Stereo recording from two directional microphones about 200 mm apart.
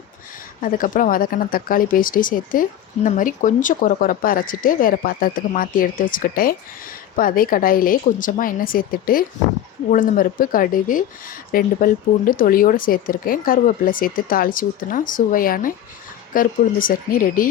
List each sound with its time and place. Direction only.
0.6 s speech: 40° left (ahead or behind)